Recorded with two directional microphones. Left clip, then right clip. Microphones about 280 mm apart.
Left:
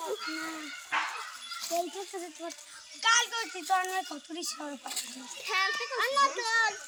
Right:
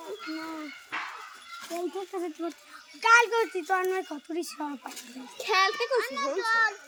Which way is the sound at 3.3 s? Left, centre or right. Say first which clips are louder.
Right 3 dB; centre.